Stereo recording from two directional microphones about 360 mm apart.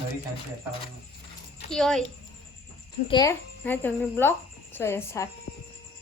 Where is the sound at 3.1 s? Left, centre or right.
Centre.